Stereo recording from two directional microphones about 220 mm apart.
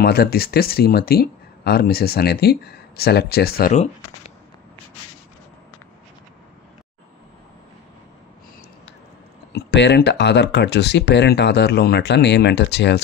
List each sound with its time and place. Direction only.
0.0 s speech: 45° left (ahead or behind)
9.5 s speech: 50° left (ahead or behind)